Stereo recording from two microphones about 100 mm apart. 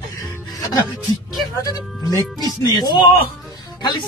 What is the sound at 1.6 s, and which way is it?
Speech, 35° left (ahead or behind).